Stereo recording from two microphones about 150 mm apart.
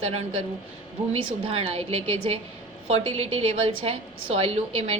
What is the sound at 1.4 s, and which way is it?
A woman's voice, 35° right (ahead or behind).